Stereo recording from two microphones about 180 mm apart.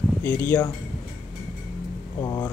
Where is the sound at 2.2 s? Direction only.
20° left (ahead or behind).